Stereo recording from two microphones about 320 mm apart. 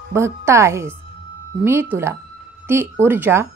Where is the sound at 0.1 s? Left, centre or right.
Centre.